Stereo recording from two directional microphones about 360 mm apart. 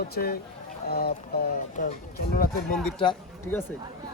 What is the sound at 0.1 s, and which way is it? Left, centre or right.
Speech, left.